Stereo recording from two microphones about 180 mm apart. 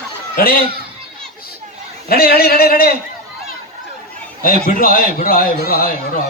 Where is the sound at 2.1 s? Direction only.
55° left (ahead or behind).